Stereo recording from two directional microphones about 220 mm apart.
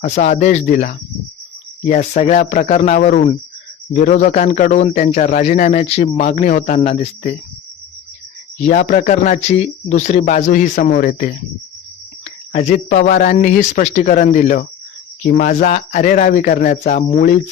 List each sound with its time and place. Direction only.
0.0 s a man's voice: 30° left (ahead or behind)
8.5 s a man's voice: 35° left (ahead or behind)